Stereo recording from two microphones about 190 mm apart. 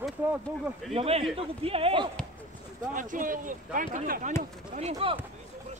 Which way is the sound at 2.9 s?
45° right (ahead or behind).